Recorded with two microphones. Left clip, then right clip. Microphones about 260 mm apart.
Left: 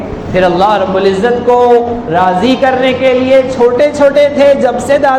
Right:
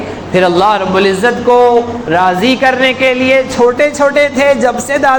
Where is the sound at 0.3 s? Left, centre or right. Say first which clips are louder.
Left 1 dB; right.